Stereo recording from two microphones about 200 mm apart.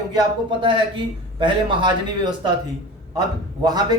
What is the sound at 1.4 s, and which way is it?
A man's voice, 25° right (ahead or behind).